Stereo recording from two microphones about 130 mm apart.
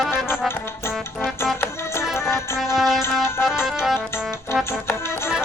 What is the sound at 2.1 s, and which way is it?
Music, 20° left (ahead or behind).